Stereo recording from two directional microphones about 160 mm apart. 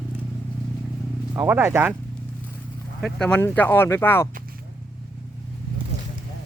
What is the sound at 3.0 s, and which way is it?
Speech, 5° left (ahead or behind).